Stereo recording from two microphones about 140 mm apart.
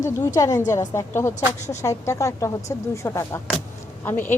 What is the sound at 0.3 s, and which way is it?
A woman's voice, 25° left (ahead or behind).